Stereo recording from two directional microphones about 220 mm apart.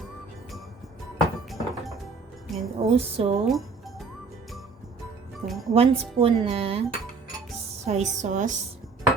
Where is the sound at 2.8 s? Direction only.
25° right (ahead or behind).